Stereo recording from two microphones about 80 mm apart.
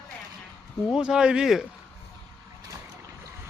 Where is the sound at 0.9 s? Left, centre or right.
Centre.